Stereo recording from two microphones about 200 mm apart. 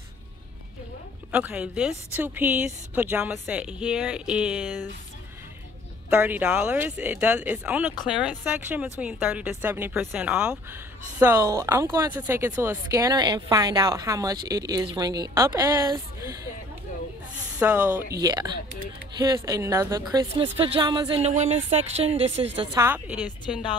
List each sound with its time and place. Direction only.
1.3 s speech: 5° right (ahead or behind)
6.0 s speech: 10° right (ahead or behind)
17.6 s a woman's voice: 10° right (ahead or behind); by 22.2 s 30° right (ahead or behind)
22.6 s speech: 15° right (ahead or behind)